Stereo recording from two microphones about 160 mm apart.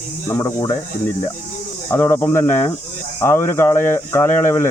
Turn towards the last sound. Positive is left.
turn(degrees=15)  # may be behind; listen again after turning